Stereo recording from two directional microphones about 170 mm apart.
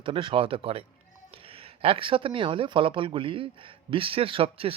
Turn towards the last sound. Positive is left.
turn(degrees=-35)  # may be behind; listen again after turning